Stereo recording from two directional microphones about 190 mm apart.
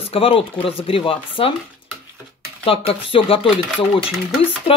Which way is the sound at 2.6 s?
30° left (ahead or behind).